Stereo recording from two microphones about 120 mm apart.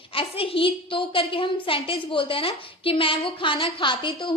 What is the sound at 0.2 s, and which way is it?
A woman's voice, 50° left (ahead or behind).